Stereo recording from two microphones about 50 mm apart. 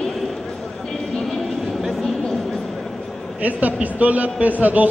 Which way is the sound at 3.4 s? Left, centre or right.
Right.